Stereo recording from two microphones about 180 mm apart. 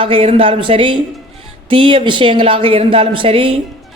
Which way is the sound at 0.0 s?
30° right (ahead or behind).